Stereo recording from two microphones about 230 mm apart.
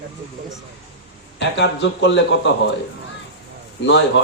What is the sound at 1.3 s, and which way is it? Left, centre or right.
A man's voice, left.